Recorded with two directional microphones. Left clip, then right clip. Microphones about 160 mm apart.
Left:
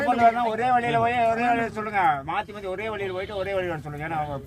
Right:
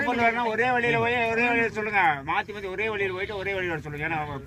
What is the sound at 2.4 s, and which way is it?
Speech, 50° left (ahead or behind).